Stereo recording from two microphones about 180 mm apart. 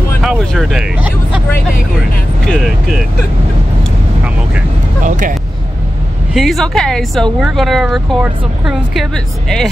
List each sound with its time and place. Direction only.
0.2 s speech: centre (ahead or behind)
2.4 s speech: centre (ahead or behind)
5.0 s speech: 45° right (ahead or behind)
6.3 s speech: centre (ahead or behind)